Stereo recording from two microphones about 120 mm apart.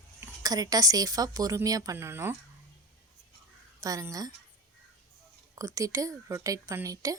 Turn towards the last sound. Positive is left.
turn(degrees=-30)  # may be behind; listen again after turning